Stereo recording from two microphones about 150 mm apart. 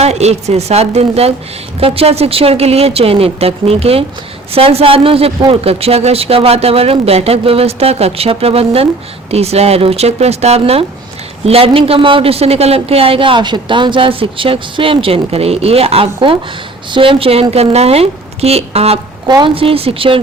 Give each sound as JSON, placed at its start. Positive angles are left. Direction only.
{"t": 0.0, "sound": "a woman's voice", "side_deg": -45}